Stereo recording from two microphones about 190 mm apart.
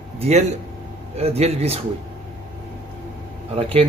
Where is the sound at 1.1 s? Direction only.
35° right (ahead or behind).